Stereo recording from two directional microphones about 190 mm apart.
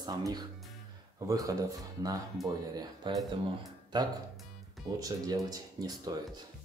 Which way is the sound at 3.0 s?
25° right (ahead or behind).